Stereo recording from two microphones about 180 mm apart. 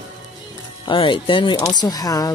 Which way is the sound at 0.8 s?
30° left (ahead or behind).